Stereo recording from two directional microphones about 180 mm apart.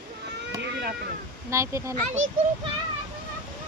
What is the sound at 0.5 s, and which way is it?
Boat, 65° right (ahead or behind).